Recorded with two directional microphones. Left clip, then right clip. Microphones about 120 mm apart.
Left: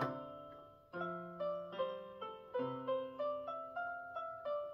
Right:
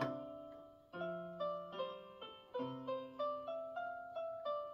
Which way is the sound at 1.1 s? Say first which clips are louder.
Even; 30° left (ahead or behind).